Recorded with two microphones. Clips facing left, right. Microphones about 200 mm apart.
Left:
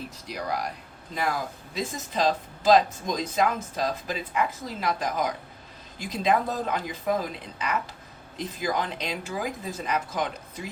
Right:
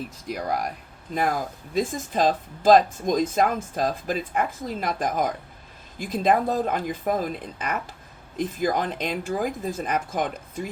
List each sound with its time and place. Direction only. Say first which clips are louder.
0.3 s speech: right 3 dB; 50° right (ahead or behind)
8.4 s speech: right 4 dB; 50° right (ahead or behind)